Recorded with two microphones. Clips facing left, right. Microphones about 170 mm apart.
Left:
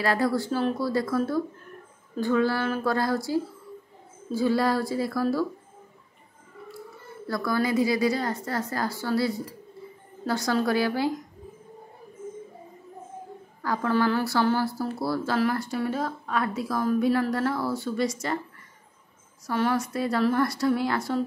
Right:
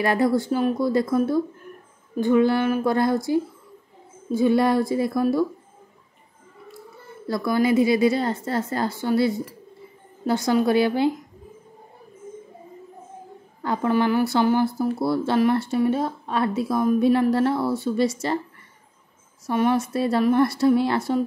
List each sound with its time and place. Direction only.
0.0 s speech: 20° right (ahead or behind)
7.2 s speech: 20° right (ahead or behind)
13.6 s speech: 20° right (ahead or behind)
19.4 s speech: 20° right (ahead or behind)